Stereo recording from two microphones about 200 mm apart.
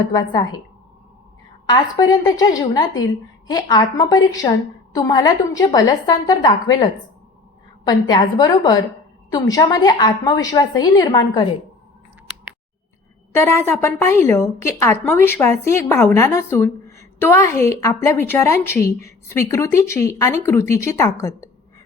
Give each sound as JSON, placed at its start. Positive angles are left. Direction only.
{"t": 1.6, "sound": "a woman's voice", "side_deg": 20}
{"t": 7.9, "sound": "a woman's voice", "side_deg": 20}
{"t": 13.3, "sound": "a woman's voice", "side_deg": 10}